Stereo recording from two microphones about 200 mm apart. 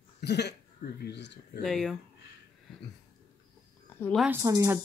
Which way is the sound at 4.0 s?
5° left (ahead or behind).